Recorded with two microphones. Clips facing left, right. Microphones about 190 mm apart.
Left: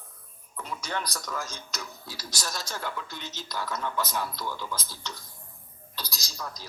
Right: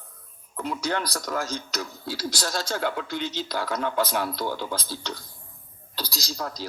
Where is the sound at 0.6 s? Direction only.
70° right (ahead or behind).